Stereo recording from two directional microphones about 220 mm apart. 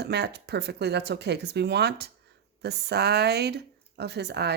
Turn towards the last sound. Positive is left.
turn(degrees=-50)  # may be behind; listen again after turning